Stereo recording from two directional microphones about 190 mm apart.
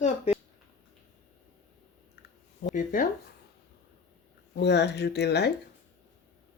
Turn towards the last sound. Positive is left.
turn(degrees=60)  # may be behind; listen again after turning